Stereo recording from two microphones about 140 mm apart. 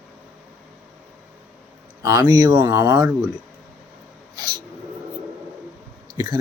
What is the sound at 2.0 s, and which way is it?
A man's voice, 25° right (ahead or behind).